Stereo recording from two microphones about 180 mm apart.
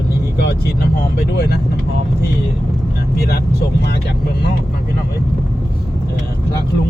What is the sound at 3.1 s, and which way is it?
Speech, 60° left (ahead or behind).